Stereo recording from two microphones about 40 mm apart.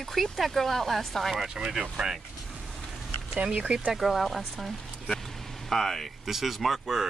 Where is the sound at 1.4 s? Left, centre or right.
Centre.